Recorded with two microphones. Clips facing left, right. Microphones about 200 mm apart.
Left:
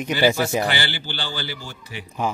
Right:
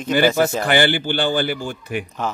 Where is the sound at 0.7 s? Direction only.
50° right (ahead or behind).